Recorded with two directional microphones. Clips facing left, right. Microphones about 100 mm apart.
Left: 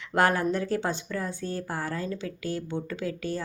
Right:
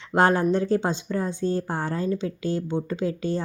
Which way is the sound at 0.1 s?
25° right (ahead or behind).